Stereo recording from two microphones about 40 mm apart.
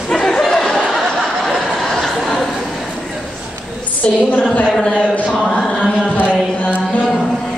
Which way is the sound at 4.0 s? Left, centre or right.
Left.